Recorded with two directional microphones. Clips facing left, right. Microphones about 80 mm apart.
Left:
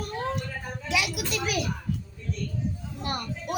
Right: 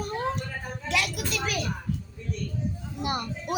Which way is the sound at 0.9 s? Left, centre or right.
Centre.